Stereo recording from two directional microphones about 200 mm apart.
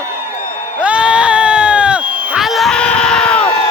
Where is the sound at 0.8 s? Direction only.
5° right (ahead or behind).